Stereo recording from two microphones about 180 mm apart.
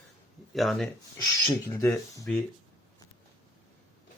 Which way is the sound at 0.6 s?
Centre (ahead or behind).